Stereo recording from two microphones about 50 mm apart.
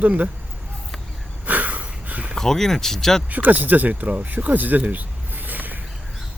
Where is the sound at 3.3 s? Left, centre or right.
Right.